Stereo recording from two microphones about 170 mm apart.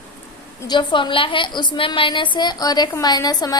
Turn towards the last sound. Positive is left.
turn(degrees=20)  # may be behind; listen again after turning